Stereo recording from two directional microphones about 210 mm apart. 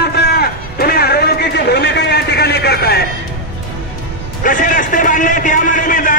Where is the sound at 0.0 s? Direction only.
50° left (ahead or behind).